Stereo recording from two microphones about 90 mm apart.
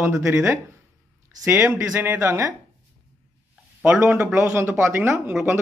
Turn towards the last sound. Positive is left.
turn(degrees=-25)  # may be behind; listen again after turning